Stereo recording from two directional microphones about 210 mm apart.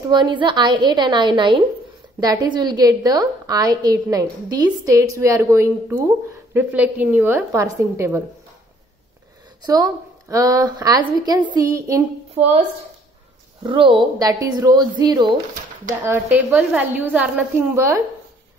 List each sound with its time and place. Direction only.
0.1 s a woman's voice: 20° right (ahead or behind)
9.6 s a woman's voice: 20° right (ahead or behind)
13.6 s a woman's voice: 25° right (ahead or behind)
16.0 s a woman's voice: 10° right (ahead or behind)